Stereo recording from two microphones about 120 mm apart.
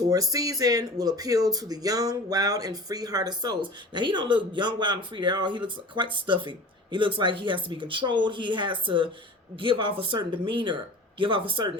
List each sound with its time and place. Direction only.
0.1 s speech: 30° right (ahead or behind)